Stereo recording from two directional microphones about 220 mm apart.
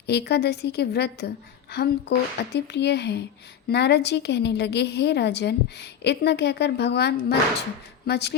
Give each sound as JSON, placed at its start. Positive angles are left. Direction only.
{"t": 0.0, "sound": "a woman's voice", "side_deg": 50}